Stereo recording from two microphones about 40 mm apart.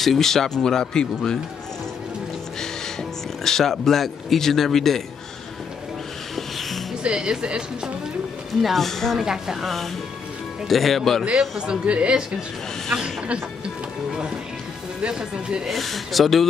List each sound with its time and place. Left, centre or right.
0.0 s speech: centre
3.4 s speech: centre
7.2 s speech: centre
8.7 s speech: centre
9.1 s speech: centre
9.6 s a man's voice: centre
11.3 s speech: centre
11.8 s speech: right
14.1 s music: right
15.0 s speech: right
15.7 s a man's voice: centre